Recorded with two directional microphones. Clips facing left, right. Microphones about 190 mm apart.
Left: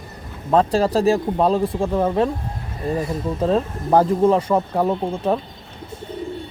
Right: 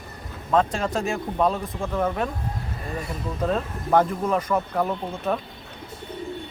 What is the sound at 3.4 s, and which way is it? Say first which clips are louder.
Speech: left 5 dB; 30° left (ahead or behind).